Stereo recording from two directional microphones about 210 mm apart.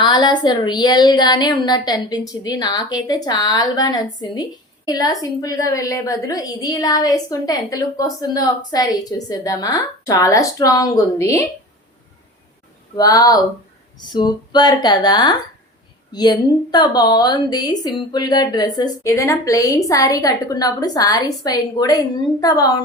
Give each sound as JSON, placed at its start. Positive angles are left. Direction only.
{"t": 0.0, "sound": "a woman's voice", "side_deg": 20}
{"t": 13.0, "sound": "a woman's voice", "side_deg": 15}